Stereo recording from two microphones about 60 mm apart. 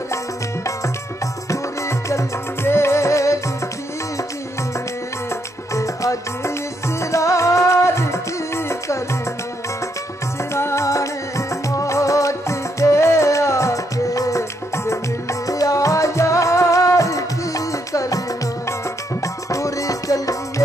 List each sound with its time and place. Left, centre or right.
1.5 s music: left
5.3 s music: left
10.5 s music: left
19.2 s music: left